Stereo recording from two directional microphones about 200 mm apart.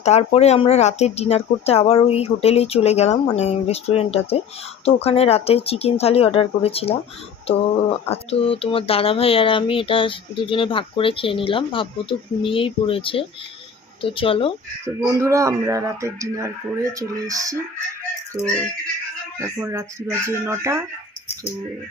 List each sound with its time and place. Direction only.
0.0 s speech: 30° left (ahead or behind)
15.2 s speech: 15° right (ahead or behind)
19.5 s speech: 15° right (ahead or behind)